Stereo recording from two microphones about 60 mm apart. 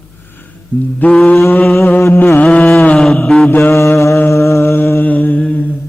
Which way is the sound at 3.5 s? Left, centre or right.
Left.